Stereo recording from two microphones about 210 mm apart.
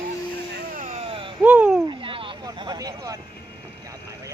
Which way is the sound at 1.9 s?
25° right (ahead or behind).